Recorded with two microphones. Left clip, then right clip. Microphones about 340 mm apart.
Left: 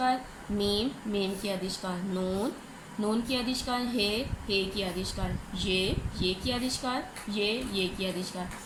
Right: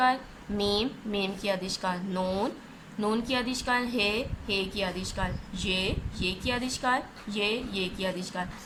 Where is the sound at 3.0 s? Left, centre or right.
Right.